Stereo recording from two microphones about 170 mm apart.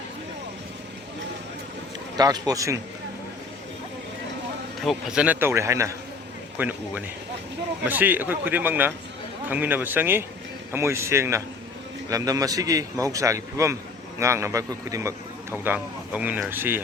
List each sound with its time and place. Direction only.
2.1 s a man's voice: 20° right (ahead or behind)
4.8 s a man's voice: centre (ahead or behind)